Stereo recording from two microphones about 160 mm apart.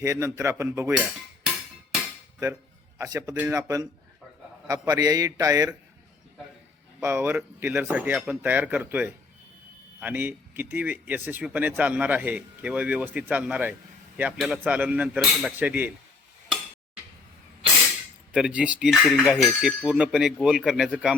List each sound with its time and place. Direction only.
0.0 s speech: 20° right (ahead or behind)
3.0 s a man's voice: 20° right (ahead or behind)
7.0 s speech: 15° right (ahead or behind)
18.3 s speech: 5° right (ahead or behind)